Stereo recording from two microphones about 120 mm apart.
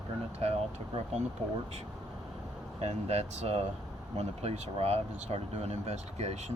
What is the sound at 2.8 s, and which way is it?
Speech, 65° right (ahead or behind).